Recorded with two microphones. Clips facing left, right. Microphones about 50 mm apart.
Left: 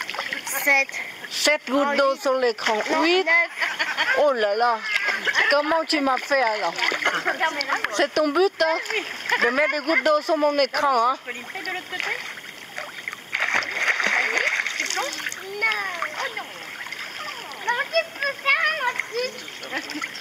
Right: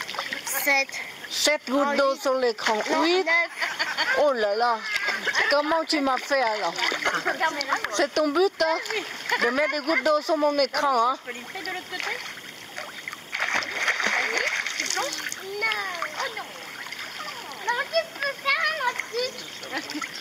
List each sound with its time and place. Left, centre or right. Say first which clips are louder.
0.0 s speech: left 3 dB; left
4.8 s a sound: left 3 dB; left
6.0 s speech: left 2 dB; left
13.5 s splash: left 3 dB; left
15.6 s a child's voice: left 3 dB; left
17.6 s splash: left 2 dB; left